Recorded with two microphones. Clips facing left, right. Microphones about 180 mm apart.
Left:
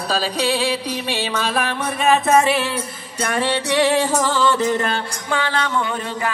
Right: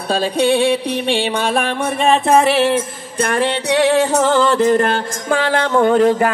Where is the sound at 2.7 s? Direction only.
55° right (ahead or behind).